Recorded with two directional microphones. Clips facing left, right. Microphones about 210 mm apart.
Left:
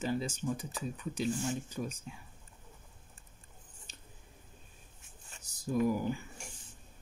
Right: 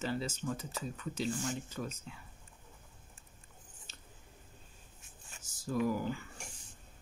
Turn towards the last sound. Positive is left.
turn(degrees=15)  # may be behind; listen again after turning